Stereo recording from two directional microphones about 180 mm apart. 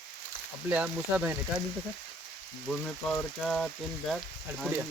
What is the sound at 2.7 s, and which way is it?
Speech, 5° left (ahead or behind).